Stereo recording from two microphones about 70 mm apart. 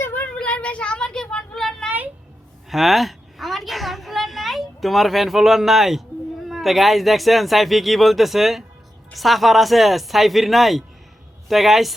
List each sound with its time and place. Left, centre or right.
0.0 s child singing: left
0.3 s a sound: centre
6.5 s speech: centre